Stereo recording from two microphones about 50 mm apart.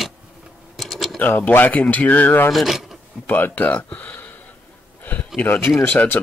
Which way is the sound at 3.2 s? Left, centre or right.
Left.